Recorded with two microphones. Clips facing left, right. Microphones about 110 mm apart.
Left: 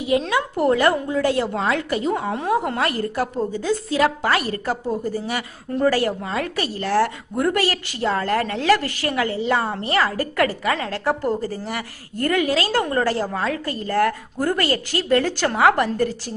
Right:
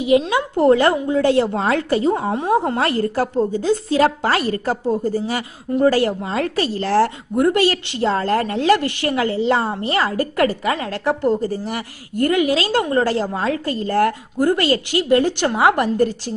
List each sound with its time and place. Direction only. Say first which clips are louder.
0.0 s a woman's voice: right 4 dB; 20° right (ahead or behind)